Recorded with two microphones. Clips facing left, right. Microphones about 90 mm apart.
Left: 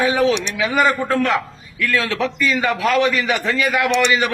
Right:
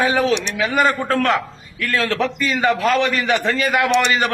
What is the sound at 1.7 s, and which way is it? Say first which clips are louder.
A man's voice: even; 45° right (ahead or behind).